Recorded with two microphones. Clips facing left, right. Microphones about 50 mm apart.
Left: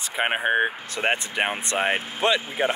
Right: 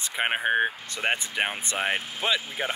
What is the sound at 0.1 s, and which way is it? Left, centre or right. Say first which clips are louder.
Speech: left 2 dB; centre.